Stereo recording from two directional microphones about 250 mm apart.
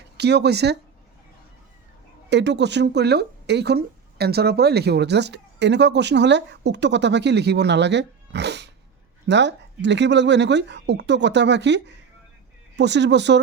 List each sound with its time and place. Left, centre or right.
0.2 s speech: right
2.3 s speech: right